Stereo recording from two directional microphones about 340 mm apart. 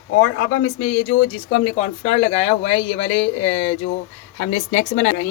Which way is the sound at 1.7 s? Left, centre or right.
Centre.